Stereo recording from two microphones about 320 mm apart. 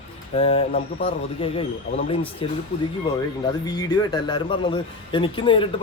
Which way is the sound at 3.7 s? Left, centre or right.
Centre.